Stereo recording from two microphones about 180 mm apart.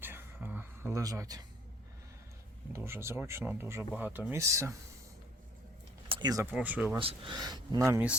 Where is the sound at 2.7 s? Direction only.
15° right (ahead or behind).